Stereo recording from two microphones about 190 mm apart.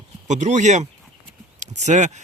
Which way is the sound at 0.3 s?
40° right (ahead or behind).